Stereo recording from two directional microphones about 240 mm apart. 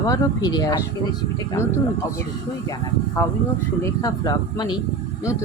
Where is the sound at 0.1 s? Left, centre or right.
Centre.